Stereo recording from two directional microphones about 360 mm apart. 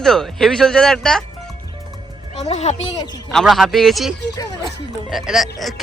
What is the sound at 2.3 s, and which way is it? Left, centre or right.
Speech, centre.